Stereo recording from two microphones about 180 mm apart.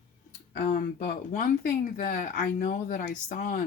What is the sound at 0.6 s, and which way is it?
Speech, 50° left (ahead or behind).